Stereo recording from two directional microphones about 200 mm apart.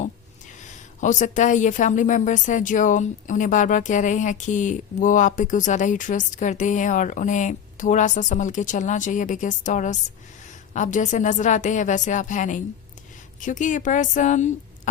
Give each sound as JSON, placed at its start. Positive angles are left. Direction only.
{"t": 1.0, "sound": "a woman's voice", "side_deg": 40}